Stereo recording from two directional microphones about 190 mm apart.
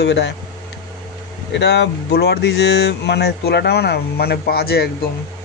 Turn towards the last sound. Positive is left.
turn(degrees=55)  # may be behind; listen again after turning